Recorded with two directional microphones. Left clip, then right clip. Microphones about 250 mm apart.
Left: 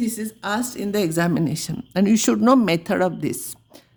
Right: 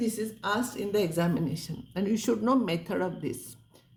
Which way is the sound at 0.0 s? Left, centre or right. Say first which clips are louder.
Left 4 dB; left.